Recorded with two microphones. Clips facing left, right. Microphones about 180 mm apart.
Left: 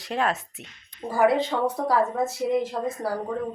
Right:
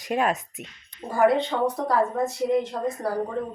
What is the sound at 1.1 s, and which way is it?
A woman's voice, centre (ahead or behind).